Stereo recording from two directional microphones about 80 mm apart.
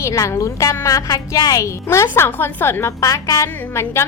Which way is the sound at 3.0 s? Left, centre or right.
Left.